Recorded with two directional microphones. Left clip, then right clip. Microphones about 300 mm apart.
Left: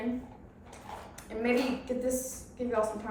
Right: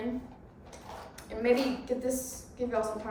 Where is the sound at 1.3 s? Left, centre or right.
Centre.